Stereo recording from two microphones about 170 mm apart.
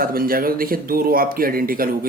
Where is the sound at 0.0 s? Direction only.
60° right (ahead or behind).